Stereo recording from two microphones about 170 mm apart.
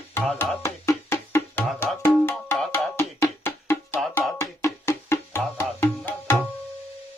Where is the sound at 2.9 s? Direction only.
15° left (ahead or behind).